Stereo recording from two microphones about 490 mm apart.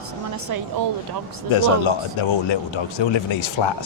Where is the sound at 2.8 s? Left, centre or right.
Left.